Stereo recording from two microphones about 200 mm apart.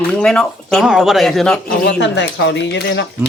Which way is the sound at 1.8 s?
60° left (ahead or behind).